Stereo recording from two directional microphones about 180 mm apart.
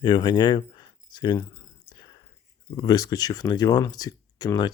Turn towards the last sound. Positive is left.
turn(degrees=20)  # may be behind; listen again after turning